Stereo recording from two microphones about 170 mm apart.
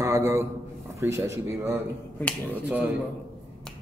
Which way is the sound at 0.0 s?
15° right (ahead or behind).